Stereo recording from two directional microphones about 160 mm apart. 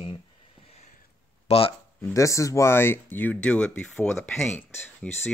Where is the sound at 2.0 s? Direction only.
20° left (ahead or behind).